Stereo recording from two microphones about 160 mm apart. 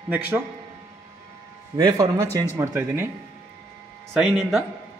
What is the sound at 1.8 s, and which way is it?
Speech, 25° right (ahead or behind).